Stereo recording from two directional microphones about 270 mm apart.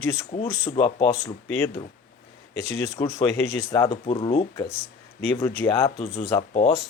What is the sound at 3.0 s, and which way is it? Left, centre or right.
Speech, centre.